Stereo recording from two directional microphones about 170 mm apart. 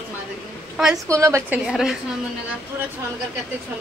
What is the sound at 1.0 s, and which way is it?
Speech, 20° right (ahead or behind).